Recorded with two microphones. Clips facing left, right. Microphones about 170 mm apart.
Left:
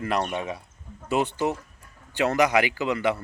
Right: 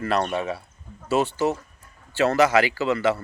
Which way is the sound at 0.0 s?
15° left (ahead or behind).